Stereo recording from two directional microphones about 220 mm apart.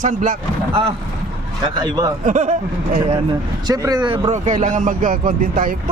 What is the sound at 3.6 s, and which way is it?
Speech, 15° right (ahead or behind).